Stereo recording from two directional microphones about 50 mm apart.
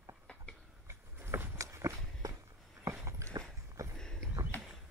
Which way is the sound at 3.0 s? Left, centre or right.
Right.